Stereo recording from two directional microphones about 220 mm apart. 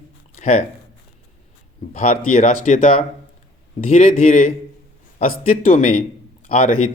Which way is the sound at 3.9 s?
35° left (ahead or behind).